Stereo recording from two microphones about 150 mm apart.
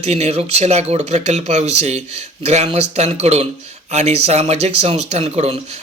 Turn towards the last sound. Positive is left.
turn(degrees=-45)  # may be behind; listen again after turning